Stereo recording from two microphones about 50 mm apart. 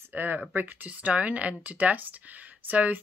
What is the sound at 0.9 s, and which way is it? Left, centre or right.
Speech, right.